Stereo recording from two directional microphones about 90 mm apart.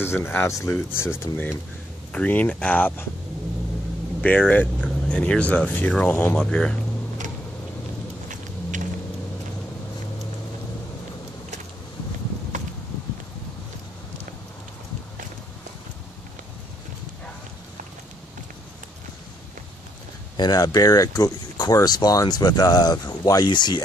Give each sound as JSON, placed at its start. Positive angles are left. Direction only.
{"t": 0.0, "sound": "speech", "side_deg": 25}
{"t": 4.2, "sound": "speech", "side_deg": 15}
{"t": 20.3, "sound": "speech", "side_deg": 50}